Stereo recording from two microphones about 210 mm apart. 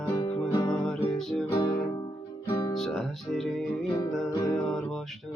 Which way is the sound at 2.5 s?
15° left (ahead or behind).